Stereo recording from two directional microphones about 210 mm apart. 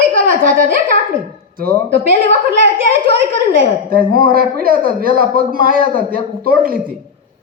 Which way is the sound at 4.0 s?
45° right (ahead or behind).